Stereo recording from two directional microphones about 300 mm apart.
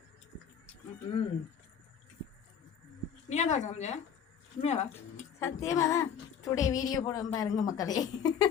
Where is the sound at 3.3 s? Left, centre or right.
Left.